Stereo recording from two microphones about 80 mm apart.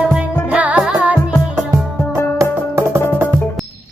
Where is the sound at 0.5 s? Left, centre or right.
Centre.